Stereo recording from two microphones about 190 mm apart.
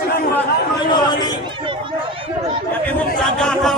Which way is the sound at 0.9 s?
20° left (ahead or behind).